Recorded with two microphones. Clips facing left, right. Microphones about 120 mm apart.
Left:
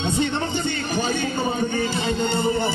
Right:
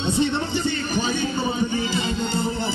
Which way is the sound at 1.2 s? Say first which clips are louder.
Even; 50° left (ahead or behind).